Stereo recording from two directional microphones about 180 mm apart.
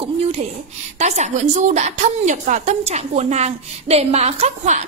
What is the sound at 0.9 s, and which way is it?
A woman's voice, 40° right (ahead or behind).